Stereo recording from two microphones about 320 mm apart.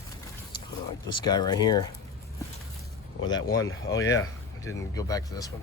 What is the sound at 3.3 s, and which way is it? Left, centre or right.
Speech, left.